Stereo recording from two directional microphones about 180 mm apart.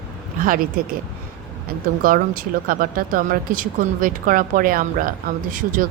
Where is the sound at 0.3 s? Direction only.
50° right (ahead or behind).